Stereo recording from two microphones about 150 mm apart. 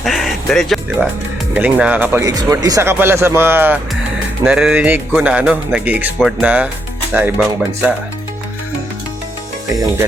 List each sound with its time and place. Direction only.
0.0 s music: centre (ahead or behind)
1.5 s speech: 10° right (ahead or behind)
2.2 s speech: 25° right (ahead or behind)